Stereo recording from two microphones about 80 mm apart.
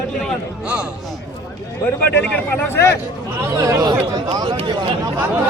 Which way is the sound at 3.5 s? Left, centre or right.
Right.